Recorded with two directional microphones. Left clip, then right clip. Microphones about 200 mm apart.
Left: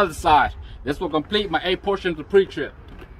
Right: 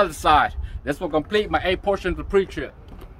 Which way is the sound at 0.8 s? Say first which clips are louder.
Even; 5° right (ahead or behind).